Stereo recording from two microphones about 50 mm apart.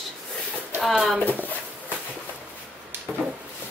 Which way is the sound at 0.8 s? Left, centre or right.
Centre.